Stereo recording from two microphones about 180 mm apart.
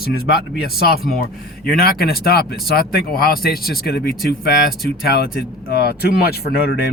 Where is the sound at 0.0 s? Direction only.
55° left (ahead or behind).